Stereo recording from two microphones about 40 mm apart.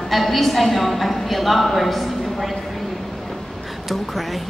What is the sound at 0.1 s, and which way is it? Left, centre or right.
A woman's voice, centre.